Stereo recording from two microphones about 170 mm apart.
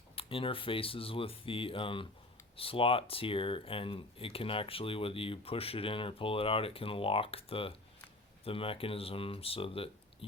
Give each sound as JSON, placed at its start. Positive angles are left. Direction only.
{"t": 0.2, "sound": "speech", "side_deg": 35}